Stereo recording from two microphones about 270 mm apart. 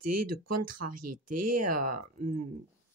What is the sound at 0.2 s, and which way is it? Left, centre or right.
Speech, right.